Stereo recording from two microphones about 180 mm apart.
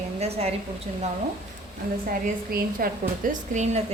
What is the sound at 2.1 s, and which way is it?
A woman's voice, 50° right (ahead or behind).